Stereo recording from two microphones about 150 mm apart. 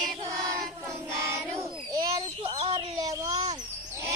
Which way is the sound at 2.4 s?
40° right (ahead or behind).